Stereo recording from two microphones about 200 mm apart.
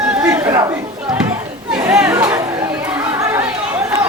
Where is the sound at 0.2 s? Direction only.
10° right (ahead or behind).